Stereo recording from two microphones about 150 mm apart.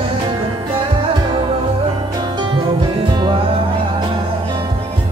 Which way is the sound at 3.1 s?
30° right (ahead or behind).